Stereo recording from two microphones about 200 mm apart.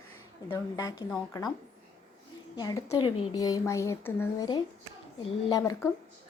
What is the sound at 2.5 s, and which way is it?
A woman's voice, 20° left (ahead or behind).